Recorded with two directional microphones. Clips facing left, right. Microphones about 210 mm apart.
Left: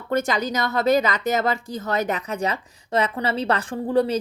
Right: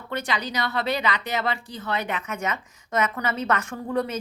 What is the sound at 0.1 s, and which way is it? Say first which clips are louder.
Speech: left 6 dB; 45° left (ahead or behind).